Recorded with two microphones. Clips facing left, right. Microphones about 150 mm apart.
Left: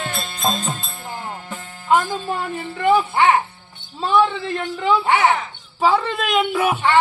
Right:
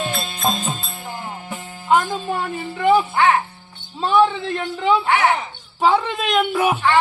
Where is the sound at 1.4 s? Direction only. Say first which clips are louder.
Right 2 dB; 15° right (ahead or behind); by 3.1 s centre (ahead or behind).